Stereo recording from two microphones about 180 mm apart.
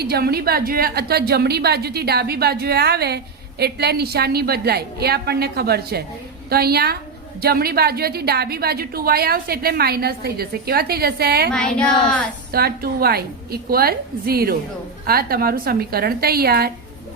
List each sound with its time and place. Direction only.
0.0 s a woman's voice: 60° right (ahead or behind)
11.5 s child singing: 5° left (ahead or behind)
12.5 s a woman's voice: 60° right (ahead or behind)